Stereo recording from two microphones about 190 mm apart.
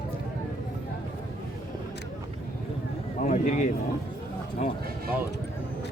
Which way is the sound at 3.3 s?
40° left (ahead or behind).